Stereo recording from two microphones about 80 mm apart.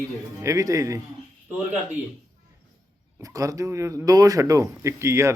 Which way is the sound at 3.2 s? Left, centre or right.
Right.